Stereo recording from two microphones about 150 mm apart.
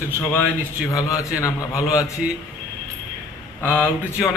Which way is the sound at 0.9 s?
20° left (ahead or behind).